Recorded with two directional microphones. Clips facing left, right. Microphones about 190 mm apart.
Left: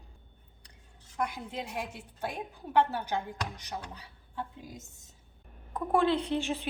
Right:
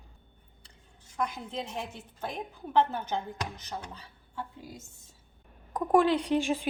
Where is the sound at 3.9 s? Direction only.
15° left (ahead or behind).